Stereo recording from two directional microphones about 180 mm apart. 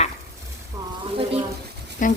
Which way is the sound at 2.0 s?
45° left (ahead or behind).